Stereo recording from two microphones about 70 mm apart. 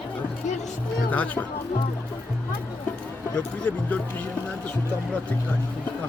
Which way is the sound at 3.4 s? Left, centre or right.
Centre.